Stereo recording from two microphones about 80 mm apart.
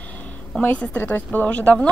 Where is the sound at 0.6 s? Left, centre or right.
Centre.